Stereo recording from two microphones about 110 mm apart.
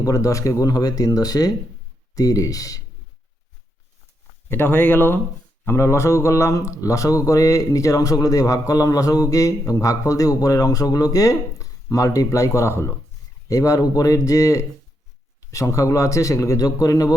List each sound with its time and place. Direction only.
0.0 s speech: 30° left (ahead or behind)
4.4 s speech: 20° left (ahead or behind)